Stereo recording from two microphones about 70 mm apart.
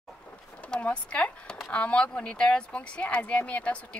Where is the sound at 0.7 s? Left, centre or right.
Centre.